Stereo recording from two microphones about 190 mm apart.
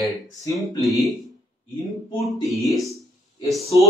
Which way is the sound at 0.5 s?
Centre (ahead or behind).